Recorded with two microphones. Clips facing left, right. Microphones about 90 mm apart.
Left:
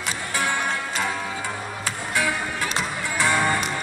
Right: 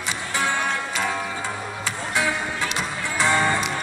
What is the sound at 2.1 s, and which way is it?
Music, 20° right (ahead or behind).